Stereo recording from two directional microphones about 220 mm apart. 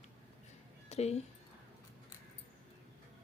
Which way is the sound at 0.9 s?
30° left (ahead or behind).